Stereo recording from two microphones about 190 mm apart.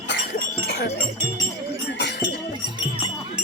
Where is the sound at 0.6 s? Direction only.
60° left (ahead or behind).